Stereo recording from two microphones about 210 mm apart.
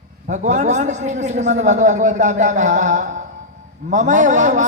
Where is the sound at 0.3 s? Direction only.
35° right (ahead or behind).